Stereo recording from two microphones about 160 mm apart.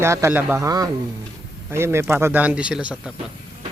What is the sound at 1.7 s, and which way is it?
Speech, 15° right (ahead or behind).